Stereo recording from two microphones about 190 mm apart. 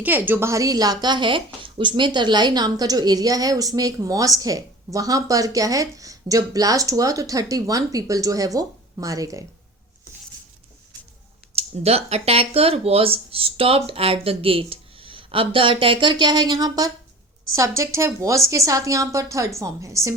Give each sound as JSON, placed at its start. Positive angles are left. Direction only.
{"t": 0.0, "sound": "a woman's voice", "side_deg": -10}
{"t": 11.5, "sound": "a woman's voice", "side_deg": -35}